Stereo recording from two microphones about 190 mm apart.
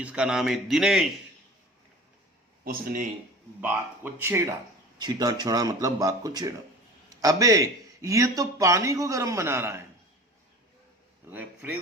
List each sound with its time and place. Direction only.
0.0 s a man's voice: 5° right (ahead or behind)
2.6 s speech: 45° right (ahead or behind)
3.6 s speech: 10° right (ahead or behind)
11.3 s speech: 10° right (ahead or behind)